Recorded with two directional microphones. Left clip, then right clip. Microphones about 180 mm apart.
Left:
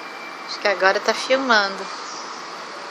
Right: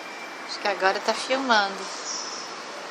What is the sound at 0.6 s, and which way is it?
Speech, 15° left (ahead or behind).